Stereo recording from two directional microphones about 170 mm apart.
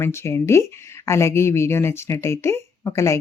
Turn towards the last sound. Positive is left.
turn(degrees=15)  # may be behind; listen again after turning